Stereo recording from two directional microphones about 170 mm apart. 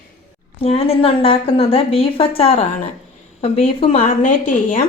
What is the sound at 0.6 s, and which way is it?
A woman's voice, 35° left (ahead or behind).